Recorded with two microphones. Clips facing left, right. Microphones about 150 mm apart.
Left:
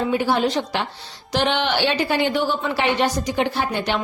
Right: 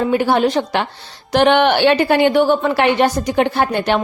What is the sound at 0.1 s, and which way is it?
A woman's voice, 55° right (ahead or behind).